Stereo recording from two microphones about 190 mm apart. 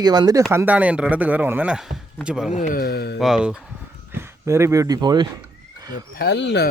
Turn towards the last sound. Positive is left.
turn(degrees=65)  # may be behind; listen again after turning